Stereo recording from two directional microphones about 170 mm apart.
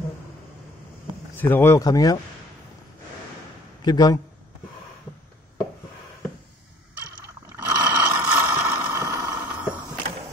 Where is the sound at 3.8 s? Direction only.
25° left (ahead or behind).